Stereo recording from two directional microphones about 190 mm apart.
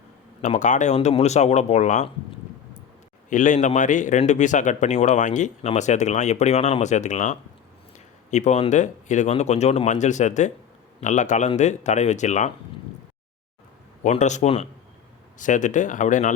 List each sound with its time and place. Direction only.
0.4 s a man's voice: 40° left (ahead or behind)
3.2 s a man's voice: 40° left (ahead or behind)
14.0 s a man's voice: 40° left (ahead or behind)